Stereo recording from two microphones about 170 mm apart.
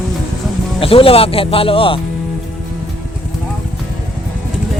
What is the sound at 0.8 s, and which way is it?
Speech, 35° left (ahead or behind).